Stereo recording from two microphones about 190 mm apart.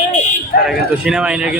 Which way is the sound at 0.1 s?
40° left (ahead or behind).